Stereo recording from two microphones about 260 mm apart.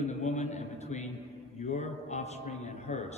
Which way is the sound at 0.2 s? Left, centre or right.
Left.